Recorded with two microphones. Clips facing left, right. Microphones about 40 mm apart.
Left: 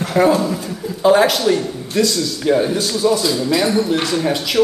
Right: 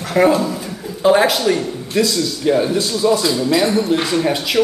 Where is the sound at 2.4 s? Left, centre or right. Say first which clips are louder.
Even; centre.